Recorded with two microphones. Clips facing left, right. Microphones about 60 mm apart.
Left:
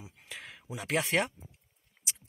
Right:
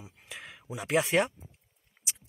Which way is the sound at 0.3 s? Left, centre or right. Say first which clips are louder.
Right 1 dB; centre.